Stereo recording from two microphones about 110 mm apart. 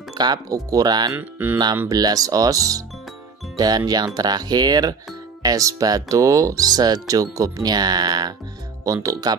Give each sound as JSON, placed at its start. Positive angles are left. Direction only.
{"t": 0.2, "sound": "speech", "side_deg": -35}
{"t": 1.1, "sound": "speech", "side_deg": -15}
{"t": 1.9, "sound": "speech", "side_deg": -35}
{"t": 8.8, "sound": "speech", "side_deg": -30}